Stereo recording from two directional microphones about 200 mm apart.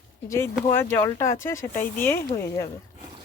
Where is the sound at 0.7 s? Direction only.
10° left (ahead or behind).